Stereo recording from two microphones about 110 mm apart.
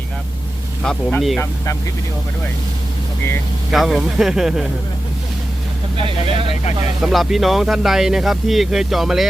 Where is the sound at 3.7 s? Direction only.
Centre (ahead or behind).